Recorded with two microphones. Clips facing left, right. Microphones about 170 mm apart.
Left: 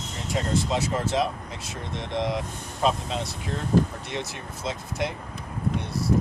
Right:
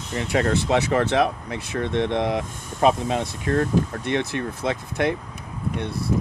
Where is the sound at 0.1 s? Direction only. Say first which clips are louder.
Right 6 dB; 65° right (ahead or behind).